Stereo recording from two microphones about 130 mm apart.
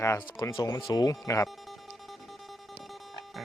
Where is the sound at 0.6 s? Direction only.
30° left (ahead or behind).